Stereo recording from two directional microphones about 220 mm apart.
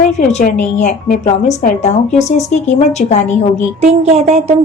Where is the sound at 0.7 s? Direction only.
35° left (ahead or behind).